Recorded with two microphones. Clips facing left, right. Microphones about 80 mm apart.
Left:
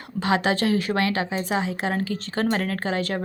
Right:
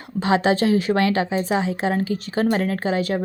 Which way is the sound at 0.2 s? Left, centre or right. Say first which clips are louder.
Right 4 dB; right.